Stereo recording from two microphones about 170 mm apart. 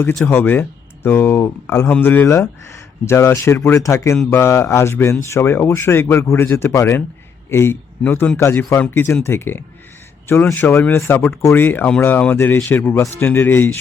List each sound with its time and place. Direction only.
0.3 s speech: 10° left (ahead or behind)